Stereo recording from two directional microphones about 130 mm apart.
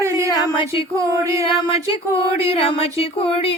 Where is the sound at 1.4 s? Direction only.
45° left (ahead or behind).